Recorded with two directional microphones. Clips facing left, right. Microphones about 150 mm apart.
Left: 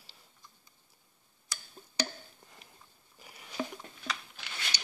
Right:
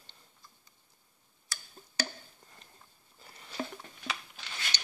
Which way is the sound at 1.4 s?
15° left (ahead or behind).